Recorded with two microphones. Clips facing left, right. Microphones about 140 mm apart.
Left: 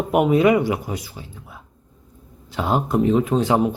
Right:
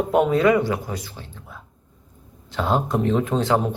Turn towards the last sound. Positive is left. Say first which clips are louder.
# left 2 dB
turn(degrees=10)  # may be behind; listen again after turning